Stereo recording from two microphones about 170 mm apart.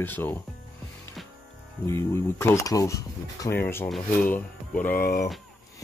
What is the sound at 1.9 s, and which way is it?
Speech, 15° left (ahead or behind).